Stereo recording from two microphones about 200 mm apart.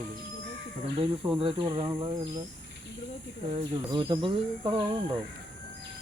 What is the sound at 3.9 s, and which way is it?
Speech, 25° right (ahead or behind).